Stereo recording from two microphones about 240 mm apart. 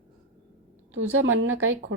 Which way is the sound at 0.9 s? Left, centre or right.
Right.